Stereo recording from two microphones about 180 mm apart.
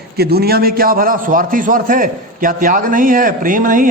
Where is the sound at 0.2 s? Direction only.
60° right (ahead or behind).